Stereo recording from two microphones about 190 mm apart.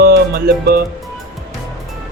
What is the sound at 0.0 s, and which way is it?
Music, 55° right (ahead or behind).